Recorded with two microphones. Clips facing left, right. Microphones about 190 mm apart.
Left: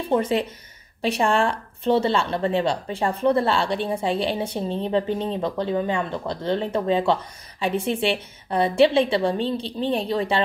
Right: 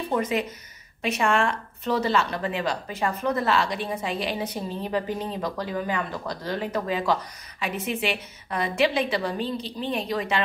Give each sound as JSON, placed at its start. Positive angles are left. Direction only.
{"t": 0.1, "sound": "a woman's voice", "side_deg": 30}